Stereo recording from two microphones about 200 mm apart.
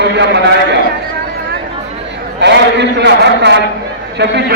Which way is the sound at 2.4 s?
60° right (ahead or behind).